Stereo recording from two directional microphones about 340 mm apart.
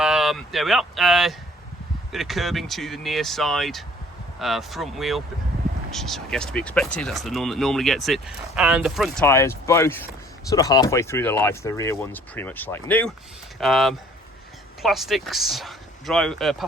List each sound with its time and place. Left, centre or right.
0.0 s speech: centre